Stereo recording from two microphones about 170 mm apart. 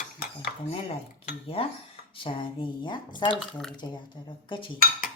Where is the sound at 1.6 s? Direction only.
35° left (ahead or behind).